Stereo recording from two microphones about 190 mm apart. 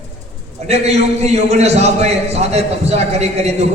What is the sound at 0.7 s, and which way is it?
A man's voice, 35° right (ahead or behind).